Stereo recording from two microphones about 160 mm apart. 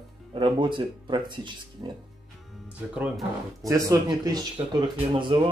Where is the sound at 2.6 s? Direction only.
5° right (ahead or behind).